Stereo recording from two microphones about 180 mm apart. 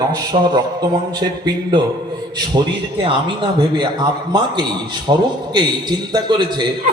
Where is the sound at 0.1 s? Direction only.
25° right (ahead or behind).